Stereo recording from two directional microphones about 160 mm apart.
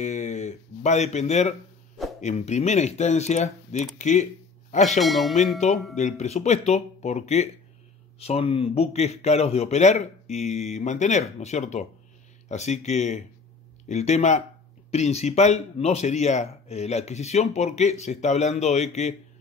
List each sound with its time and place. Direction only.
0.0 s speech: 50° left (ahead or behind)
5.0 s bell: centre (ahead or behind)
5.9 s speech: 45° left (ahead or behind)